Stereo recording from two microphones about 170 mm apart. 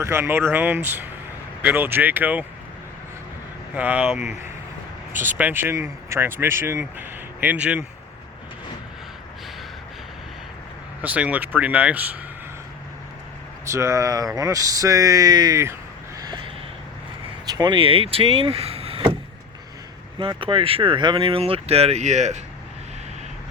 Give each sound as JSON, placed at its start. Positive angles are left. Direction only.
{"t": 0.0, "sound": "speech", "side_deg": -15}
{"t": 3.8, "sound": "speech", "side_deg": -10}
{"t": 5.4, "sound": "speech", "side_deg": -10}
{"t": 11.0, "sound": "speech", "side_deg": -10}
{"t": 13.7, "sound": "speech", "side_deg": -15}
{"t": 16.2, "sound": "a sound", "side_deg": -25}
{"t": 17.4, "sound": "speech", "side_deg": -25}
{"t": 20.1, "sound": "speech", "side_deg": -30}